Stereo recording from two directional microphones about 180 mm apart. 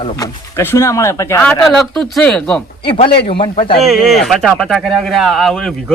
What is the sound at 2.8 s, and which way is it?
Speech, 30° left (ahead or behind).